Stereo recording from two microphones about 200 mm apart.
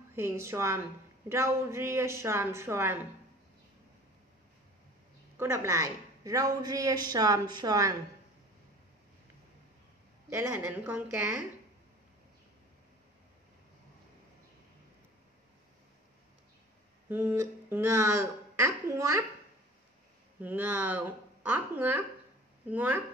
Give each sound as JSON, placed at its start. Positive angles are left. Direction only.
{"t": 0.1, "sound": "a woman's voice", "side_deg": -10}
{"t": 5.4, "sound": "a woman's voice", "side_deg": -15}
{"t": 10.3, "sound": "a woman's voice", "side_deg": -10}
{"t": 17.1, "sound": "a woman's voice", "side_deg": -10}
{"t": 20.3, "sound": "a woman's voice", "side_deg": -10}